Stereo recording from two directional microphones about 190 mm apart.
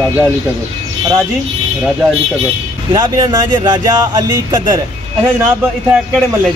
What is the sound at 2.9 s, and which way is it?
Speech, 20° right (ahead or behind).